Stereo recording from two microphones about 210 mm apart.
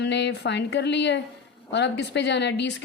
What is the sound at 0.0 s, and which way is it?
A woman's voice, 55° left (ahead or behind).